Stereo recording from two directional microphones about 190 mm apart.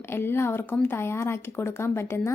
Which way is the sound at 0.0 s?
10° left (ahead or behind).